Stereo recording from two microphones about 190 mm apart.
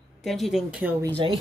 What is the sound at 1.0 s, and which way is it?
Speech, 25° right (ahead or behind).